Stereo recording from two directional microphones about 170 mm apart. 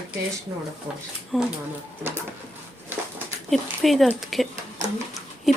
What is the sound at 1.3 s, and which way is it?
Speech, centre (ahead or behind).